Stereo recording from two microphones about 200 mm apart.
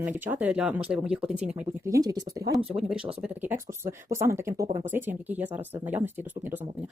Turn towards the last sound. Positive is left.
turn(degrees=-10)  # may be behind; listen again after turning